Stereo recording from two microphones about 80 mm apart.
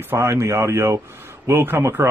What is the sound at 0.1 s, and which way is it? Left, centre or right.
A man's voice, right.